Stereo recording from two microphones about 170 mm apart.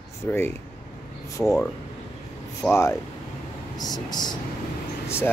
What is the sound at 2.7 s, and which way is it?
Speech, 15° left (ahead or behind).